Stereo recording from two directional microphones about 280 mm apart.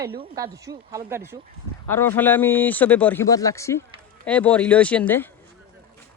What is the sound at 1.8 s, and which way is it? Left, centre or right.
Speech, centre.